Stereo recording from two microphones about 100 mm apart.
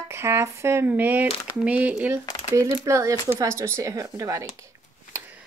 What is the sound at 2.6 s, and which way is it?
Speech, 30° right (ahead or behind).